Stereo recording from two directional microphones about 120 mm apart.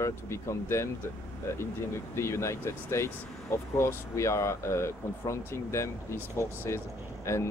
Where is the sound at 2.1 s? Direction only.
20° left (ahead or behind).